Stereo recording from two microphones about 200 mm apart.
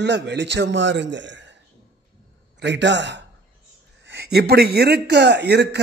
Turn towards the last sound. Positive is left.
turn(degrees=-55)  # may be behind; listen again after turning